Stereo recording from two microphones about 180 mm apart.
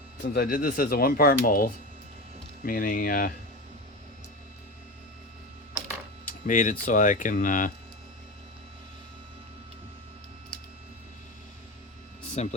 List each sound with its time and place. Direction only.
0.2 s speech: 55° left (ahead or behind)
6.4 s speech: 45° left (ahead or behind)
12.4 s speech: 40° left (ahead or behind)